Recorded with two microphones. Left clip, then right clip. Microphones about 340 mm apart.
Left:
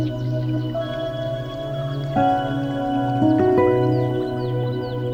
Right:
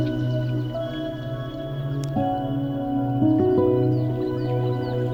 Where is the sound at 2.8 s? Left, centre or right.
Left.